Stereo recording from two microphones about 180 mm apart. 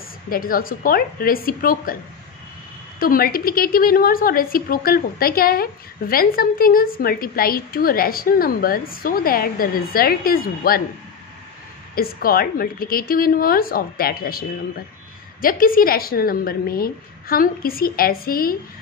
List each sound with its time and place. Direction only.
0.3 s a woman's voice: 55° left (ahead or behind)
3.0 s a woman's voice: 55° left (ahead or behind)
11.9 s a woman's voice: 55° left (ahead or behind)
15.4 s a woman's voice: 50° left (ahead or behind)